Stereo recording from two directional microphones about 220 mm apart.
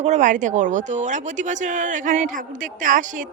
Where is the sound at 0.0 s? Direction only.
35° right (ahead or behind).